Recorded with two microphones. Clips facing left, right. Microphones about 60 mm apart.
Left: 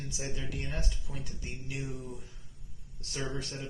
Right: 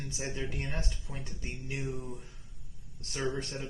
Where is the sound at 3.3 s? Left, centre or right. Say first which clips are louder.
Right 2 dB; right.